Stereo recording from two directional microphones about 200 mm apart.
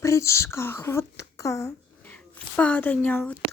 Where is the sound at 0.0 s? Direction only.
15° left (ahead or behind).